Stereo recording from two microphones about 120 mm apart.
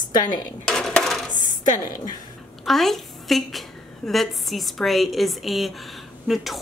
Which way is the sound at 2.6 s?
Centre (ahead or behind).